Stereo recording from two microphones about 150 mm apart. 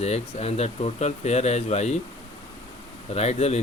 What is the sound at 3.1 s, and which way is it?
Speech, 45° left (ahead or behind).